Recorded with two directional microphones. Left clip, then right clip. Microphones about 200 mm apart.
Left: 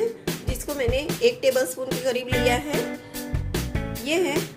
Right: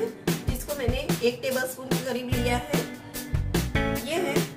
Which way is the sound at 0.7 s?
35° left (ahead or behind).